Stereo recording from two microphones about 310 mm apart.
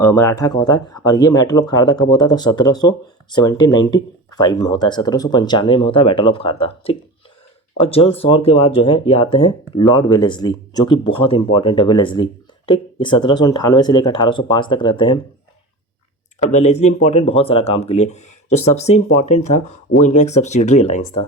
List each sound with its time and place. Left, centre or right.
0.0 s speech: centre
16.4 s speech: left